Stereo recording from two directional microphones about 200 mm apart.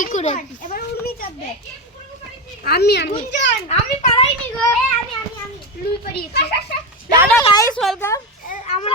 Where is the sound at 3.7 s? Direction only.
30° left (ahead or behind).